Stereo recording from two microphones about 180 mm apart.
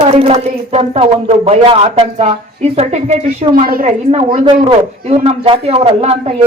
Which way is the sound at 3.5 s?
55° right (ahead or behind).